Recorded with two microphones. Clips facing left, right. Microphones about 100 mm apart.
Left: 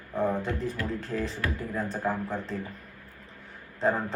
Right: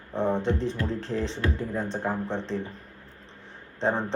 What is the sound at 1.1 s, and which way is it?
A man's voice, 25° right (ahead or behind).